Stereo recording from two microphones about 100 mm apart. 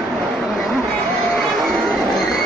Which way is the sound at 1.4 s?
Centre (ahead or behind).